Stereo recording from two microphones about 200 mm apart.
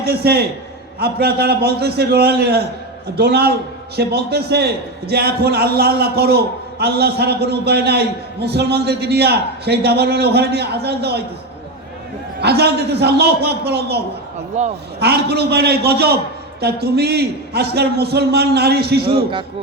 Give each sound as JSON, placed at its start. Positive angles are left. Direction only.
{"t": 0.0, "sound": "a man's voice", "side_deg": -50}
{"t": 12.4, "sound": "a man's voice", "side_deg": -55}